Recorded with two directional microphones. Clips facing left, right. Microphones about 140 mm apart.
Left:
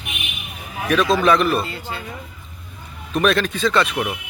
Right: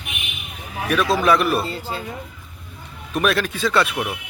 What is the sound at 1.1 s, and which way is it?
Speech, 5° right (ahead or behind).